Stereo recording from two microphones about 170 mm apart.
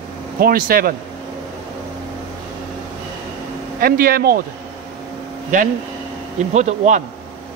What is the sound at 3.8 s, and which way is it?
Speech, 60° right (ahead or behind).